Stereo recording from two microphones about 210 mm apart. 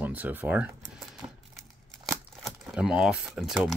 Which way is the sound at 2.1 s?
Centre (ahead or behind).